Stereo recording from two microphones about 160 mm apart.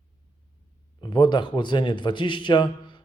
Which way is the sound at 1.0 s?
30° left (ahead or behind).